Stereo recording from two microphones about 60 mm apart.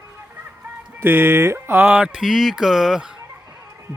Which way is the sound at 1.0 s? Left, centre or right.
Right.